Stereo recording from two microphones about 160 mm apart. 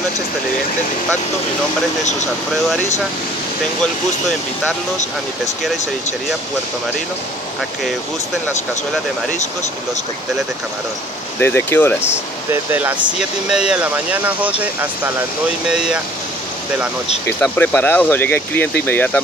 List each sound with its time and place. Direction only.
11.3 s speech: 15° left (ahead or behind)
12.1 s speech: 10° right (ahead or behind)
17.3 s speech: 10° left (ahead or behind)